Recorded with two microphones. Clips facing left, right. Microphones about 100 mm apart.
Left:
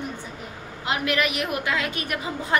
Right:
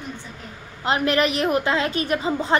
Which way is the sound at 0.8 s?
35° right (ahead or behind).